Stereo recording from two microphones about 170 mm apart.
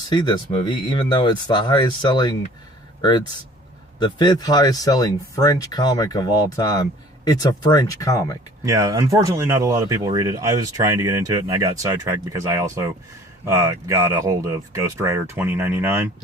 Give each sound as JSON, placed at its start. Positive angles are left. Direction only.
{"t": 0.1, "sound": "speech", "side_deg": 25}
{"t": 8.6, "sound": "speech", "side_deg": -20}